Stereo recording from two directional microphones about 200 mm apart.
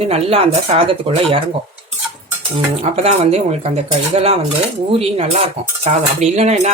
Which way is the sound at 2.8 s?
30° right (ahead or behind).